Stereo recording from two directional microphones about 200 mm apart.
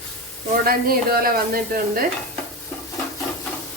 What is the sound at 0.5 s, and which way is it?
A woman's voice, 50° right (ahead or behind).